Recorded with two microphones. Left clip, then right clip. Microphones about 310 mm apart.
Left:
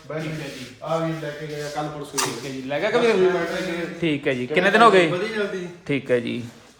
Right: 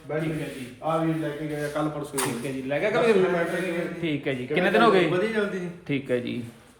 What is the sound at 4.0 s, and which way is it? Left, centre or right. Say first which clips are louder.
A man's voice: left 5 dB; left.